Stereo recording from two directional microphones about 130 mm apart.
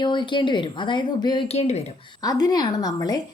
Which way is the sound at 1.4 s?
55° left (ahead or behind).